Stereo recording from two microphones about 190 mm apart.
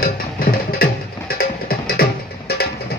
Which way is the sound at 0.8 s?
50° left (ahead or behind).